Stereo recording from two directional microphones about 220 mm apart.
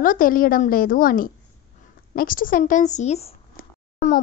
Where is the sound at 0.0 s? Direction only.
40° left (ahead or behind).